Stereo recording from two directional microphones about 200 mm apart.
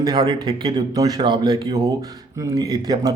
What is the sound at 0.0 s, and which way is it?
A man's voice, 20° right (ahead or behind).